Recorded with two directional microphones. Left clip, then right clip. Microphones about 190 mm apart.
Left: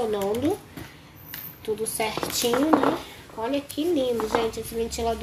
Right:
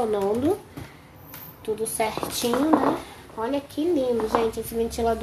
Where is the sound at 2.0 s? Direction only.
Centre (ahead or behind).